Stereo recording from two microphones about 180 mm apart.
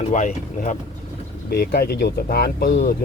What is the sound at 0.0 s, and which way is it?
Speech, 45° left (ahead or behind).